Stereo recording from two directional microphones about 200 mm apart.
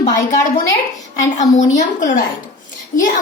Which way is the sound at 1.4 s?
35° left (ahead or behind).